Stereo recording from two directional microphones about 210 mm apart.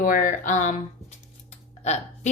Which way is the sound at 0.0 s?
40° left (ahead or behind).